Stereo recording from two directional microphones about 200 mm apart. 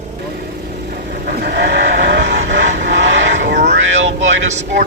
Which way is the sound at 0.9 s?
50° right (ahead or behind).